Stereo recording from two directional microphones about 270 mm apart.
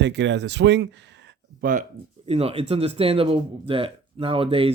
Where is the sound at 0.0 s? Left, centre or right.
Right.